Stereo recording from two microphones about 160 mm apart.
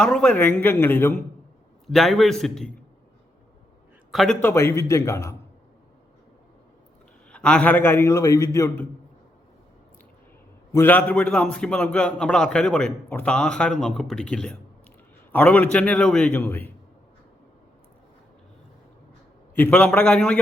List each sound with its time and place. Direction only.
0.0 s a man's voice: 5° left (ahead or behind)
1.9 s a man's voice: centre (ahead or behind)
4.1 s a man's voice: 5° left (ahead or behind); by 5.3 s 20° left (ahead or behind)
7.3 s a man's voice: 5° left (ahead or behind)
10.7 s a man's voice: 15° left (ahead or behind)
19.5 s a man's voice: 10° left (ahead or behind)